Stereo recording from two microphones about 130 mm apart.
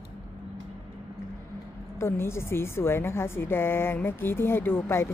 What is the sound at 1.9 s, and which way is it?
A woman's voice, 20° left (ahead or behind).